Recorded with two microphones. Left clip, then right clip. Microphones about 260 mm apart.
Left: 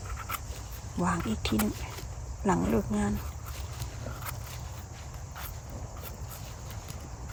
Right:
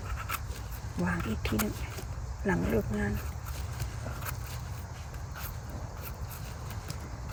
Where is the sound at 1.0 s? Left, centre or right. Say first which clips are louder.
Left 3 dB; centre.